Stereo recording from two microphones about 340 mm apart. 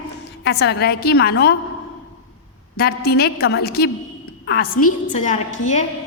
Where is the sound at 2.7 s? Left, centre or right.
Left.